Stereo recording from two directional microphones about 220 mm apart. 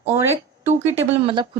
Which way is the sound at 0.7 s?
25° right (ahead or behind).